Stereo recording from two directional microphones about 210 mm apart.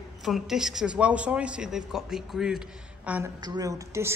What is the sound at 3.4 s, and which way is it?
Speech, 20° right (ahead or behind).